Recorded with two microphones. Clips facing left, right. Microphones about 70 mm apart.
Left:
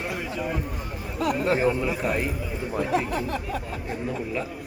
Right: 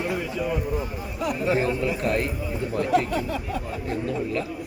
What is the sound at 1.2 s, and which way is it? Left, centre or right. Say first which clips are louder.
Speech: left 1 dB; left.